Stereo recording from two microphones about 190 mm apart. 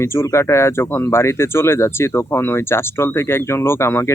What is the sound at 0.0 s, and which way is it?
Speech, 15° left (ahead or behind).